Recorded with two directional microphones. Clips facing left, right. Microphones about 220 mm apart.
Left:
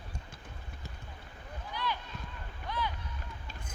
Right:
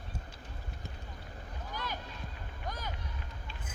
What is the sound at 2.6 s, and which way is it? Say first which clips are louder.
Boat: left 5 dB; 45° right (ahead or behind).